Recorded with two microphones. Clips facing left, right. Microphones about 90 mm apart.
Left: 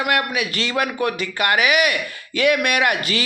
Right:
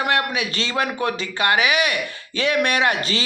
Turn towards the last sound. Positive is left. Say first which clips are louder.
# left 1 dB
turn(degrees=-25)  # may be behind; listen again after turning